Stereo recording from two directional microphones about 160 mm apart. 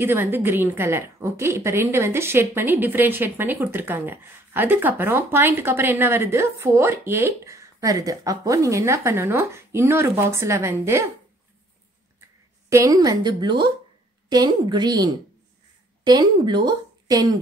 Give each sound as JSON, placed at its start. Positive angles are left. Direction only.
{"t": 0.0, "sound": "a woman's voice", "side_deg": -15}
{"t": 12.7, "sound": "a woman's voice", "side_deg": -20}
{"t": 16.1, "sound": "a woman's voice", "side_deg": -25}